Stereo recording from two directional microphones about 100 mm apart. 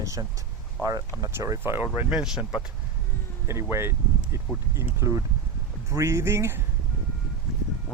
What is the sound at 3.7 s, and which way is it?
Speech, 25° right (ahead or behind).